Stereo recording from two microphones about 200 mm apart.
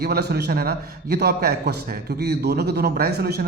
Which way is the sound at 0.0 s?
50° right (ahead or behind).